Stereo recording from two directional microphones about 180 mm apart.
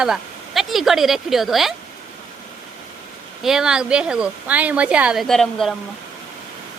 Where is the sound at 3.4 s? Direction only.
5° right (ahead or behind).